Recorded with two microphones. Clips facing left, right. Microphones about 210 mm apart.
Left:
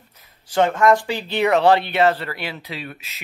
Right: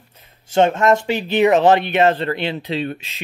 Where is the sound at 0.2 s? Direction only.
25° right (ahead or behind).